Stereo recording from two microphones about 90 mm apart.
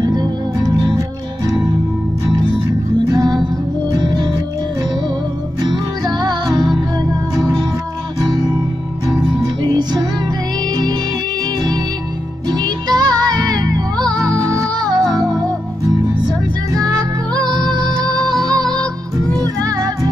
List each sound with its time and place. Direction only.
0.0 s music: 50° right (ahead or behind)
3.1 s music: 45° right (ahead or behind)
5.6 s music: 55° right (ahead or behind)
9.6 s music: 50° right (ahead or behind)
12.4 s music: 50° right (ahead or behind)
17.5 s music: 45° right (ahead or behind)